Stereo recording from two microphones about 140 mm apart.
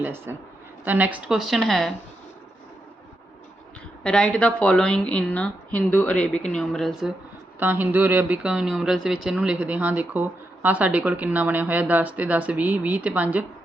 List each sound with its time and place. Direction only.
0.0 s a woman's voice: 15° right (ahead or behind); by 1.9 s centre (ahead or behind)
4.0 s speech: 5° left (ahead or behind)
7.6 s speech: 15° right (ahead or behind)